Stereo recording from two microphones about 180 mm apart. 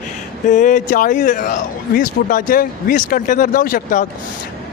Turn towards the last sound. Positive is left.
turn(degrees=50)  # may be behind; listen again after turning